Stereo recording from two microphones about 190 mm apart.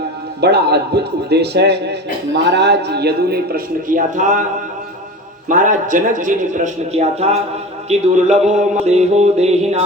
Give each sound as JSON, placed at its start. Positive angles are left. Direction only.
{"t": 0.4, "sound": "a man's voice", "side_deg": -60}
{"t": 5.5, "sound": "speech", "side_deg": -45}
{"t": 7.9, "sound": "a sound", "side_deg": -35}